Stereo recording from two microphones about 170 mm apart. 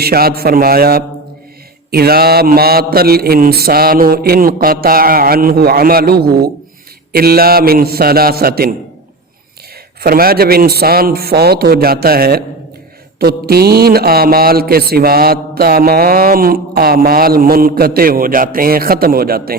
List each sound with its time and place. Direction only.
0.0 s mantra: 65° right (ahead or behind)
10.0 s mantra: 60° right (ahead or behind)